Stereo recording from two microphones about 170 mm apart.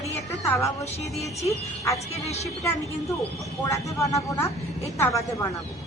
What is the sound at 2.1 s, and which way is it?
Speech, 40° left (ahead or behind).